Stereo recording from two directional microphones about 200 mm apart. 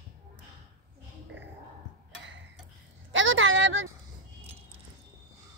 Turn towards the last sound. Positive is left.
turn(degrees=-75)  # may be behind; listen again after turning